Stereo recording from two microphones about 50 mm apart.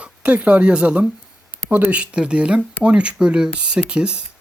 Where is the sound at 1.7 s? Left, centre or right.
Right.